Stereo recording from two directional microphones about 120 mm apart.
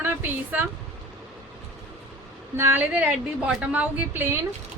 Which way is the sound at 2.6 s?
15° right (ahead or behind).